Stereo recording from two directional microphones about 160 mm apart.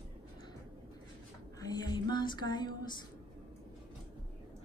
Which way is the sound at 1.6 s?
25° left (ahead or behind).